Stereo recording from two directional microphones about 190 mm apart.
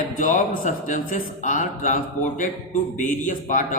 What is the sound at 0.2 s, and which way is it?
A man's voice, 40° left (ahead or behind).